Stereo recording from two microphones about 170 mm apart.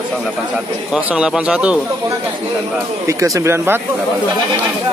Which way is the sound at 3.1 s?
20° right (ahead or behind).